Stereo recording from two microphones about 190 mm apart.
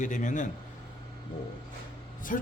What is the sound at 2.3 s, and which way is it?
Speech, 45° left (ahead or behind).